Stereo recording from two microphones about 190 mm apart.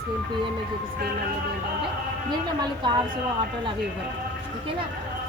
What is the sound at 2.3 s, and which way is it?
Speech, 20° right (ahead or behind).